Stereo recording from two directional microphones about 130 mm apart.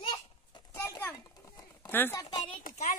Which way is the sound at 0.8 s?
20° left (ahead or behind).